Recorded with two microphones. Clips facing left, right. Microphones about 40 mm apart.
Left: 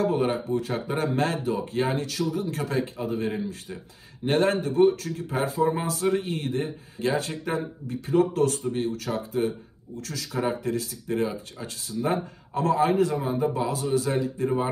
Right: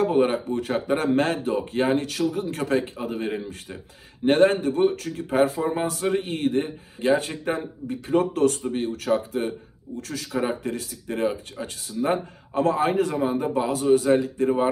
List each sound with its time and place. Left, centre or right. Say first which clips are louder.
0.0 s a man's voice: right 3 dB; right